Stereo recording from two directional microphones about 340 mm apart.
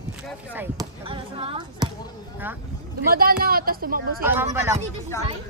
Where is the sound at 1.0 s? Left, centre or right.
Centre.